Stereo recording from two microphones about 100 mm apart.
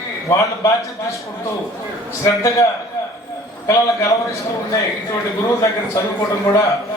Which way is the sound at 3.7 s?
30° left (ahead or behind).